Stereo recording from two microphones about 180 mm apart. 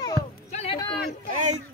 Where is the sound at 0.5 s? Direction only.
35° left (ahead or behind).